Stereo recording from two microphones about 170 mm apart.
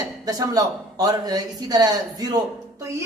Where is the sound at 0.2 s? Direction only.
20° right (ahead or behind).